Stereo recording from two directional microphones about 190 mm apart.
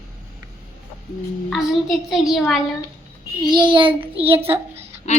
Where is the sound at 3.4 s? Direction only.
25° right (ahead or behind).